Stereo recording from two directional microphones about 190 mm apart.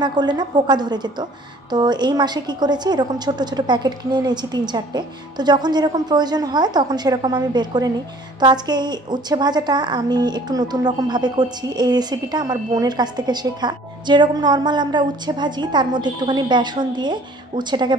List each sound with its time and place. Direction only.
0.0 s a woman's voice: 20° right (ahead or behind)